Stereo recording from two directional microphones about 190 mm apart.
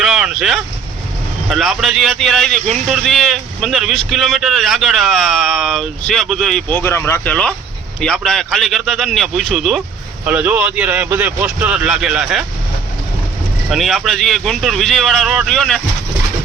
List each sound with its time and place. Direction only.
0.0 s vehicle: centre (ahead or behind)
1.5 s speech: centre (ahead or behind)
13.7 s speech: centre (ahead or behind)